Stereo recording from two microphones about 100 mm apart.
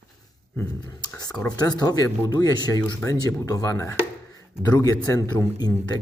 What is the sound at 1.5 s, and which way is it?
Speech, 40° left (ahead or behind).